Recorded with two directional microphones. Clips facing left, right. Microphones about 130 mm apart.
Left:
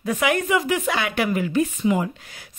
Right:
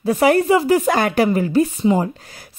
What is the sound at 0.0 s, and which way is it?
A woman's voice, 35° right (ahead or behind).